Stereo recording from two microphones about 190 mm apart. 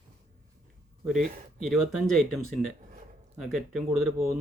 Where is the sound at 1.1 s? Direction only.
Centre (ahead or behind).